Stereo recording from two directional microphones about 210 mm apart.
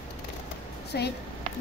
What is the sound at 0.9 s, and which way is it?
Speech, 50° left (ahead or behind).